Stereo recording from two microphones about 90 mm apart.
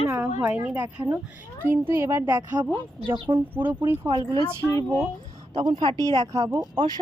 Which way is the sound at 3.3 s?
75° right (ahead or behind).